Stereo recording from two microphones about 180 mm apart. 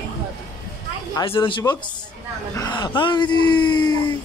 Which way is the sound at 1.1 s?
30° left (ahead or behind).